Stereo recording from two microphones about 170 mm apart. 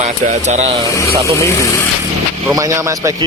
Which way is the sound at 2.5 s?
20° right (ahead or behind).